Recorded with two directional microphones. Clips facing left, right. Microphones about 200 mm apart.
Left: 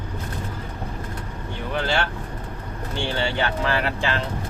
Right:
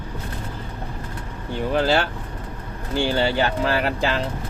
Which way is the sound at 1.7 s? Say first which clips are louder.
Right 5 dB; 35° right (ahead or behind).